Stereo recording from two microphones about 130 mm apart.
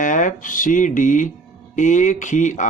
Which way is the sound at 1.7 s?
75° left (ahead or behind).